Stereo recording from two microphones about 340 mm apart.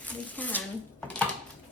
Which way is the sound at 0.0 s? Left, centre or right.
Centre.